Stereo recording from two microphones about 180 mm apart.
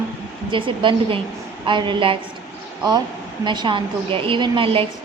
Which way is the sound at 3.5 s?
25° right (ahead or behind).